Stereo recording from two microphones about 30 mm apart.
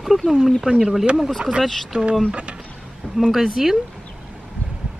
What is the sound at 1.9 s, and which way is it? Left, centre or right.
Speech, right.